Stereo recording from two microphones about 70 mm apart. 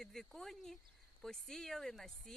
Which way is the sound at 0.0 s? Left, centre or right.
Centre.